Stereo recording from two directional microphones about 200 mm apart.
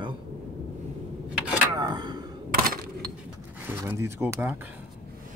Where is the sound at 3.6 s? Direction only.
10° right (ahead or behind).